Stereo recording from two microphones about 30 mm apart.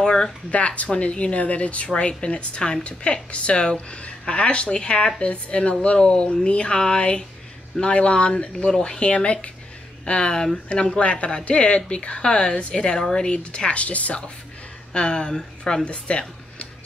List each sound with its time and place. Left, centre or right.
0.0 s a sound: left
0.5 s a woman's voice: left
2.2 s a woman's voice: left
10.0 s speech: left
11.0 s a woman's voice: left
14.9 s speech: left
15.8 s speech: left